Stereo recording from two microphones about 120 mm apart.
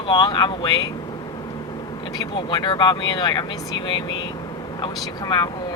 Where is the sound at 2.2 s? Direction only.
40° left (ahead or behind).